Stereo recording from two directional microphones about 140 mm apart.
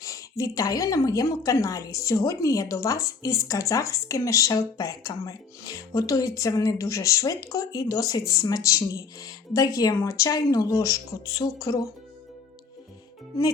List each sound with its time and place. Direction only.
0.0 s a woman's voice: 25° left (ahead or behind)